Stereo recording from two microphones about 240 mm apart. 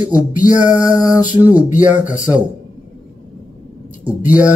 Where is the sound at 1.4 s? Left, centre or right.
Centre.